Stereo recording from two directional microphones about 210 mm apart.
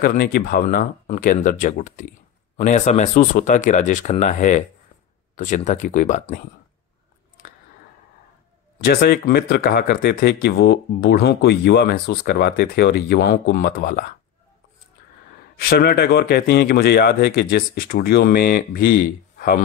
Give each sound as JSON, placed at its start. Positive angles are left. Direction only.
{"t": 0.0, "sound": "speech", "side_deg": 45}
{"t": 8.8, "sound": "speech", "side_deg": 45}
{"t": 15.7, "sound": "speech", "side_deg": 45}